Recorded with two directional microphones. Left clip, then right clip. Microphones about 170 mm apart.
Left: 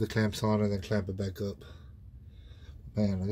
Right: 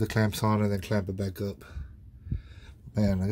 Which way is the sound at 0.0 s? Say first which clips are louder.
Right 3 dB; 50° right (ahead or behind).